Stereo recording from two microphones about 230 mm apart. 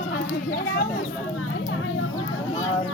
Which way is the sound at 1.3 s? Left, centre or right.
Left.